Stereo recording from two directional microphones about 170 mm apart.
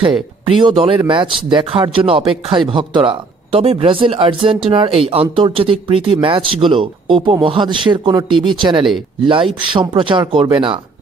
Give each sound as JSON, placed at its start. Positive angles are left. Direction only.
{"t": 0.5, "sound": "speech", "side_deg": -30}